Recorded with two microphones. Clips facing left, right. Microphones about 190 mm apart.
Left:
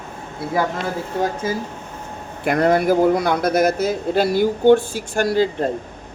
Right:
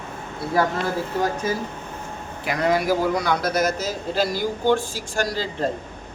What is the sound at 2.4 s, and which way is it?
A man's voice, 55° left (ahead or behind).